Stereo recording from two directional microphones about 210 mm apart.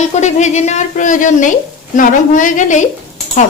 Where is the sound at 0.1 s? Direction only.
35° left (ahead or behind).